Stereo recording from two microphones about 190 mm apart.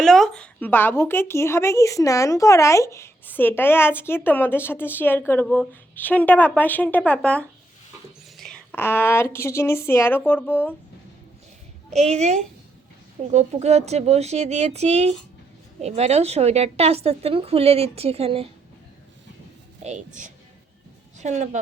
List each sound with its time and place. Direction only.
0.0 s a woman's voice: centre (ahead or behind)
11.9 s a woman's voice: 35° right (ahead or behind)
19.8 s a woman's voice: 40° right (ahead or behind)